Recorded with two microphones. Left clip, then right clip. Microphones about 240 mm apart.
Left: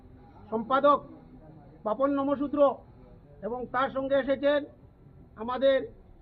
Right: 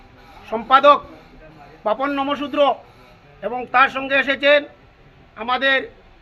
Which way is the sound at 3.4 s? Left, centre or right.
Right.